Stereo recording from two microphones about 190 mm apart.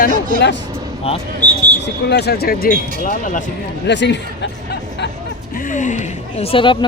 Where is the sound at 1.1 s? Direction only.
30° left (ahead or behind).